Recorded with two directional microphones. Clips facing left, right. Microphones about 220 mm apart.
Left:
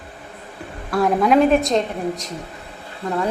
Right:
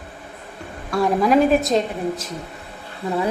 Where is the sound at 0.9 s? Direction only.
Centre (ahead or behind).